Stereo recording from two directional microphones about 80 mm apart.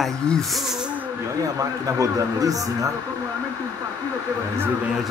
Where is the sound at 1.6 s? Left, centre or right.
Right.